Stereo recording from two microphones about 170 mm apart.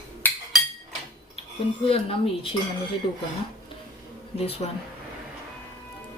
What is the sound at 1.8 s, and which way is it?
Speech, 35° left (ahead or behind).